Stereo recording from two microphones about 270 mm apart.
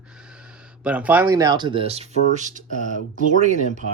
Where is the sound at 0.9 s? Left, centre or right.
Centre; by 2.6 s right.